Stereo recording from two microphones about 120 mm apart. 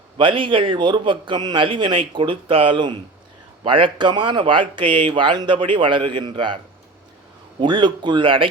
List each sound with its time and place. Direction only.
0.2 s speech: 45° right (ahead or behind)
7.6 s speech: 40° right (ahead or behind)